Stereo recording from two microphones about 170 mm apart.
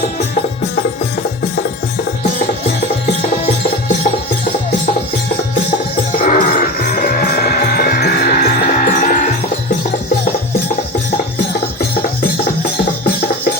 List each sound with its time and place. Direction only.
6.1 s music: 55° left (ahead or behind)
8.4 s music: 50° left (ahead or behind)